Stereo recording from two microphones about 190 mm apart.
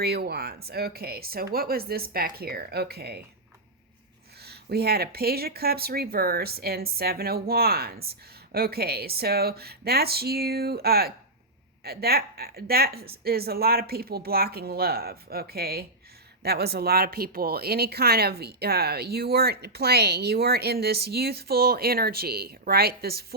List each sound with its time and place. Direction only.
0.0 s speech: 55° right (ahead or behind)
4.4 s speech: 55° right (ahead or behind)